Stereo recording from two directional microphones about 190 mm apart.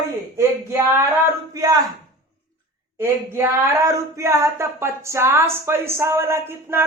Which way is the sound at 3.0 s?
10° right (ahead or behind).